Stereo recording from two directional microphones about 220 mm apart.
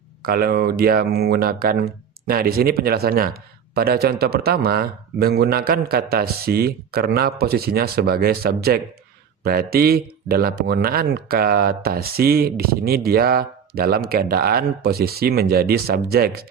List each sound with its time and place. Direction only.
0.2 s speech: 45° right (ahead or behind)